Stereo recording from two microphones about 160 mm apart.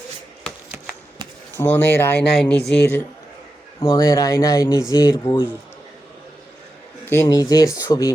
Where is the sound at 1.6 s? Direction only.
15° left (ahead or behind).